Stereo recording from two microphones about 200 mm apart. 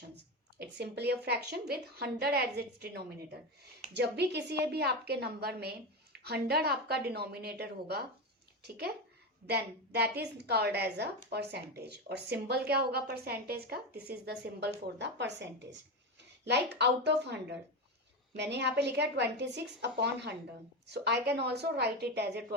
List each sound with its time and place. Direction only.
0.6 s a woman's voice: 55° right (ahead or behind)
9.5 s a woman's voice: 55° right (ahead or behind)